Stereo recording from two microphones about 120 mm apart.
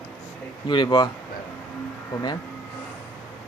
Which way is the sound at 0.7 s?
40° left (ahead or behind).